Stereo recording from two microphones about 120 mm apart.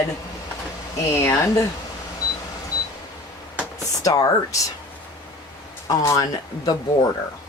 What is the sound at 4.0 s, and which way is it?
Speech, 30° left (ahead or behind).